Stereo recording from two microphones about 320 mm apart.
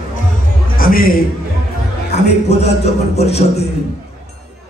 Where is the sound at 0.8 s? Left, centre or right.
Left.